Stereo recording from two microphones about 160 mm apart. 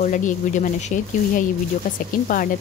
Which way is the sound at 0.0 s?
50° left (ahead or behind).